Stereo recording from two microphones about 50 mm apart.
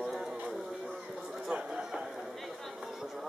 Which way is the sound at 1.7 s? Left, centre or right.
Centre.